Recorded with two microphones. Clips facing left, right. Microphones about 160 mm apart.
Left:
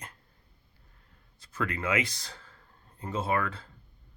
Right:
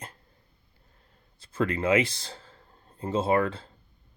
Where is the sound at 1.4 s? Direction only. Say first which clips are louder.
Right 6 dB; 30° right (ahead or behind).